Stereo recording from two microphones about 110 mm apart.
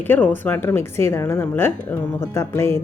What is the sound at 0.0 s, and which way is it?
Speech, 15° left (ahead or behind).